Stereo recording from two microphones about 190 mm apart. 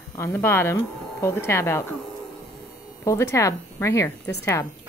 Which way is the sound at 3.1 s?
15° left (ahead or behind).